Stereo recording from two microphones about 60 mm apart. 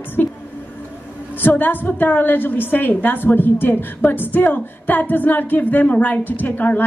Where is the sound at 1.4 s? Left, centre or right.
Left.